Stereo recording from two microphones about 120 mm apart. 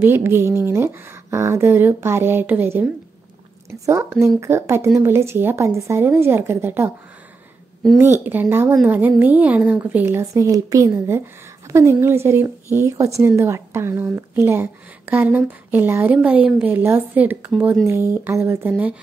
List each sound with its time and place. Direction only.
0.0 s speech: 20° right (ahead or behind)
8.0 s speech: 15° right (ahead or behind)